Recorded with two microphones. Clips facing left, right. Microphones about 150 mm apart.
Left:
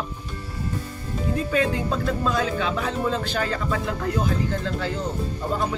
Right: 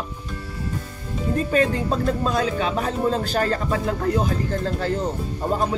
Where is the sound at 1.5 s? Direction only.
40° right (ahead or behind).